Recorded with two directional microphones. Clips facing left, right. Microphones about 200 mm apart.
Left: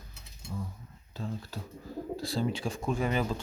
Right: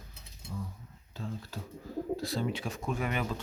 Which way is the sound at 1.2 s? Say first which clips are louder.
Left 2 dB; 35° left (ahead or behind).